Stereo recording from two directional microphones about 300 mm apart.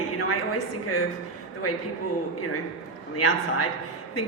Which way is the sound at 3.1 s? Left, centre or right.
Left.